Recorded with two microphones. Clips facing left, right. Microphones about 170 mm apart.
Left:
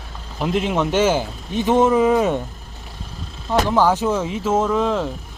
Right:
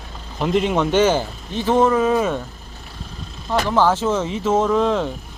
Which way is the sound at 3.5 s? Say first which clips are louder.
Left 1 dB; 10° left (ahead or behind).